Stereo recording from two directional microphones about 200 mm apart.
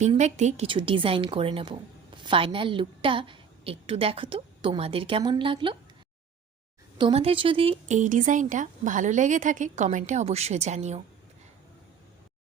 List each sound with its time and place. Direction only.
0.0 s a woman's voice: 35° right (ahead or behind)
7.0 s speech: 30° right (ahead or behind)